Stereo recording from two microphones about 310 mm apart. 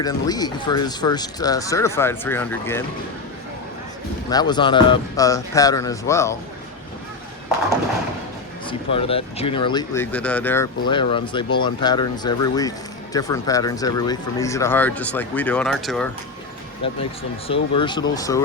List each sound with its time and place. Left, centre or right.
0.0 s speech: centre
4.3 s speech: centre
8.6 s speech: centre
16.8 s speech: centre